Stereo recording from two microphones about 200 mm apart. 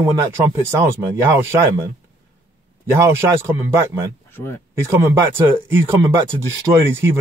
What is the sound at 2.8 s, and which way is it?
Speech, 15° right (ahead or behind).